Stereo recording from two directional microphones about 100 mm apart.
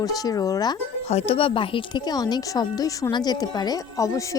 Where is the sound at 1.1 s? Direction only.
85° left; by 2.0 s 60° left (ahead or behind).